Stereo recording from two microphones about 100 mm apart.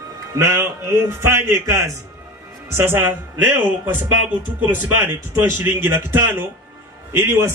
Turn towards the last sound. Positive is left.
turn(degrees=-25)  # may be behind; listen again after turning